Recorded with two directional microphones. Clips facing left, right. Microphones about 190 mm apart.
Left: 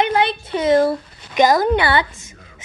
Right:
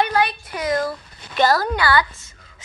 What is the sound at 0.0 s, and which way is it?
Speech, 25° left (ahead or behind).